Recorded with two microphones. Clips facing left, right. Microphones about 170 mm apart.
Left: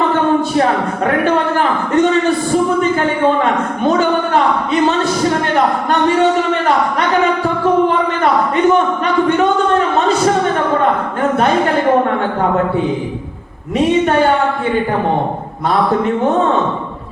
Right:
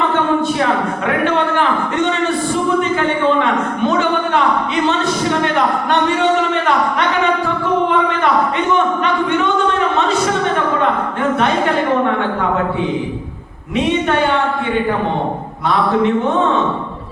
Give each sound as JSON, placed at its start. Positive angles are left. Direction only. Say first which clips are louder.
{"t": 1.2, "sound": "a man's voice", "louder": "even", "side_deg": 40}